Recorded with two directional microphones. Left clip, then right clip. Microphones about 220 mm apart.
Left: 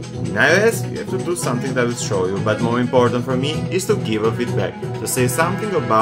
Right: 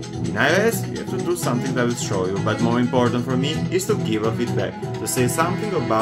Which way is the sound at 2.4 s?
Centre (ahead or behind).